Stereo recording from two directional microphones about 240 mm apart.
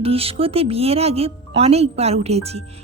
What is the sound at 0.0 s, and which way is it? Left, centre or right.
A woman's voice, right.